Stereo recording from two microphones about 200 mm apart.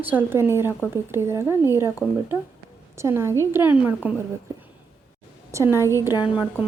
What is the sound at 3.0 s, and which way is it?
A woman's voice, 15° right (ahead or behind).